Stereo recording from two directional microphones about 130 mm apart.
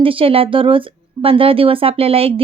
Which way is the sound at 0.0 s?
45° right (ahead or behind).